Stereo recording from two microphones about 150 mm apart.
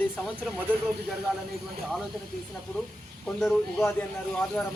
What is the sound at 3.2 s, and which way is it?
A woman's voice, 5° left (ahead or behind).